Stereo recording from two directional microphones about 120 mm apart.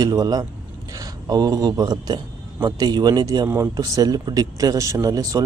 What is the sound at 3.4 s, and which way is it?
Speech, 25° right (ahead or behind).